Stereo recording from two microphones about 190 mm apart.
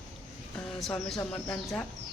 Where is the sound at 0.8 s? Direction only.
Centre (ahead or behind).